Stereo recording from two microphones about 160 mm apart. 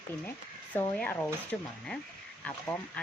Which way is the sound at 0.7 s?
10° left (ahead or behind).